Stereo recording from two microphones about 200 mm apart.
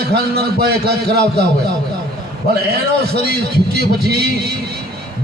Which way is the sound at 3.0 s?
55° right (ahead or behind).